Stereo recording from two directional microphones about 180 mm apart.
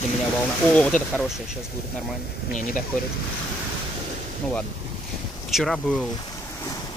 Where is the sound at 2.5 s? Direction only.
50° left (ahead or behind).